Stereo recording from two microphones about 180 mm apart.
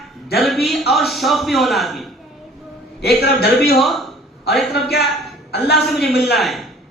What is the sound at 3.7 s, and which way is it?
A man's voice, centre (ahead or behind).